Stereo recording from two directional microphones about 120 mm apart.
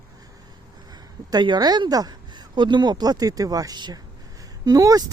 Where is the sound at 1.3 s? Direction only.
35° right (ahead or behind).